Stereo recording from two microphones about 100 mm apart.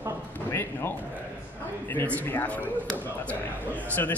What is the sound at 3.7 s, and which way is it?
Speech, 20° left (ahead or behind).